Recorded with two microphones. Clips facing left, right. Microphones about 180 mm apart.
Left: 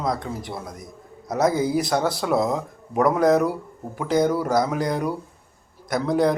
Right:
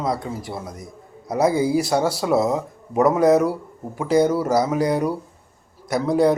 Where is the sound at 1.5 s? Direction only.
30° right (ahead or behind).